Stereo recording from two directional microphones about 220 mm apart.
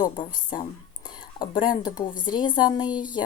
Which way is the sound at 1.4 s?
20° left (ahead or behind).